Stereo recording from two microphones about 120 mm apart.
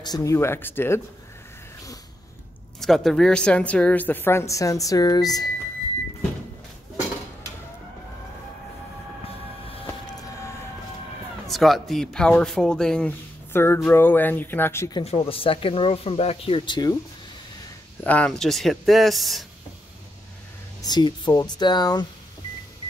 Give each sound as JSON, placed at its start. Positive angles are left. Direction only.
{"t": 0.0, "sound": "speech", "side_deg": 30}
{"t": 2.8, "sound": "a woman's voice", "side_deg": 5}
{"t": 11.4, "sound": "speech", "side_deg": 0}
{"t": 13.5, "sound": "a woman's voice", "side_deg": 20}
{"t": 15.0, "sound": "speech", "side_deg": 50}
{"t": 18.0, "sound": "speech", "side_deg": 10}
{"t": 20.8, "sound": "speech", "side_deg": 35}